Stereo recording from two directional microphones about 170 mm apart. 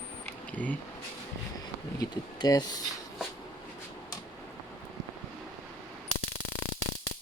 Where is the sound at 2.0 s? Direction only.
20° left (ahead or behind).